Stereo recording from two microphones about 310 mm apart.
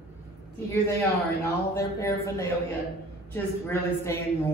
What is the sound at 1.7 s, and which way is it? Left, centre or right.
A man's voice, centre.